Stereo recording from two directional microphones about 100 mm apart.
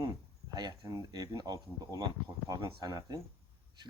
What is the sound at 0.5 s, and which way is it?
Speech, 45° right (ahead or behind).